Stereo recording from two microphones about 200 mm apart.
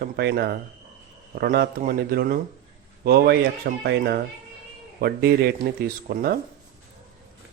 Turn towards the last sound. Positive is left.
turn(degrees=-50)  # may be behind; listen again after turning